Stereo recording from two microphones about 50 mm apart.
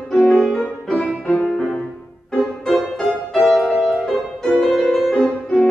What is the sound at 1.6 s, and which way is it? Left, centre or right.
Music, centre.